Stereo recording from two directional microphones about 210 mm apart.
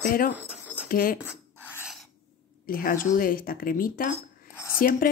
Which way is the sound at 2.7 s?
45° left (ahead or behind).